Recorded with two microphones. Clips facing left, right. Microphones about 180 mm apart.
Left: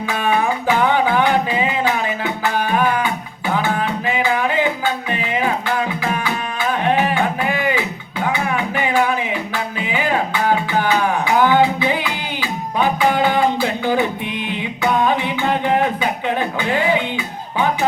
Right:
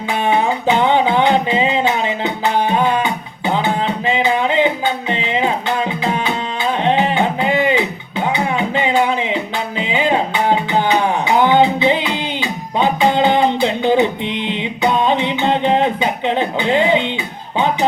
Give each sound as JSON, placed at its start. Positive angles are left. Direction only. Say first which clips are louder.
{"t": 0.1, "sound": "music", "louder": "right 3 dB", "side_deg": -20}